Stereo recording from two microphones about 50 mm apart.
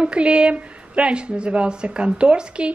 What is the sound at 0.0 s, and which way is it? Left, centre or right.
A woman's voice, right.